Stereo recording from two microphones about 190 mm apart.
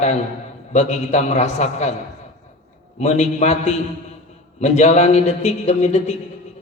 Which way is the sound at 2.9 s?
35° left (ahead or behind).